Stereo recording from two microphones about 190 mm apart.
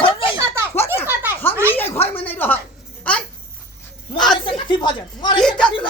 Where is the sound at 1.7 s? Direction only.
10° left (ahead or behind).